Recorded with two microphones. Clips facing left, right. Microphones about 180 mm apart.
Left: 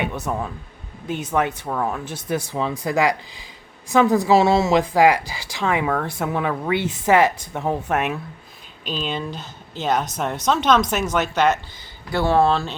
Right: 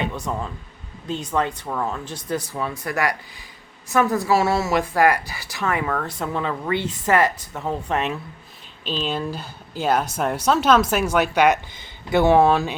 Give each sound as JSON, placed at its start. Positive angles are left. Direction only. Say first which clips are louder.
{"t": 0.0, "sound": "a woman's voice", "louder": "left 1 dB", "side_deg": 15}
{"t": 2.6, "sound": "a woman's voice", "louder": "left 7 dB", "side_deg": 20}
{"t": 5.2, "sound": "speech", "louder": "left 2 dB", "side_deg": 90}
{"t": 5.5, "sound": "a woman's voice", "louder": "left 2 dB", "side_deg": 15}
{"t": 9.0, "sound": "speech", "louder": "right 1 dB", "side_deg": -5}